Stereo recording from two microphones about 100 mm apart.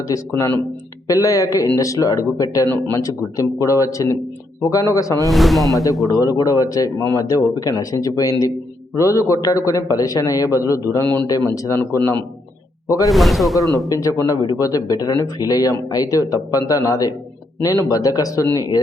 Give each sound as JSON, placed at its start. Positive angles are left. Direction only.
{"t": 0.1, "sound": "speech", "side_deg": 25}
{"t": 5.3, "sound": "speech", "side_deg": 0}
{"t": 6.1, "sound": "speech", "side_deg": 35}
{"t": 10.9, "sound": "speech", "side_deg": 25}
{"t": 11.3, "sound": "speech", "side_deg": 35}
{"t": 13.1, "sound": "speech", "side_deg": 0}
{"t": 13.8, "sound": "speech", "side_deg": 35}